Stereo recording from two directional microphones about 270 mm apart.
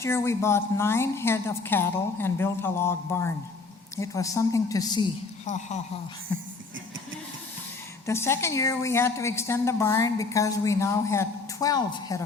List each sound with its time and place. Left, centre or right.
0.0 s a woman's voice: centre
5.5 s speech: left
8.0 s a woman's voice: centre